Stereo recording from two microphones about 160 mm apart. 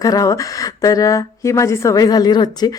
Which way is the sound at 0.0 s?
20° left (ahead or behind).